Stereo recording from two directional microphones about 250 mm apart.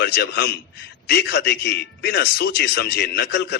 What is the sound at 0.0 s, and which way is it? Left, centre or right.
A man's voice, left.